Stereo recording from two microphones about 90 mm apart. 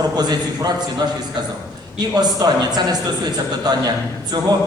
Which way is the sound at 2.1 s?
45° right (ahead or behind).